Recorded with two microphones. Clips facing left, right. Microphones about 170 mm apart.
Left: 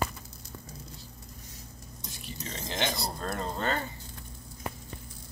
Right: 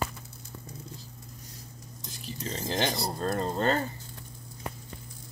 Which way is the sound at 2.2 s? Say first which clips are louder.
Right 5 dB; 40° right (ahead or behind).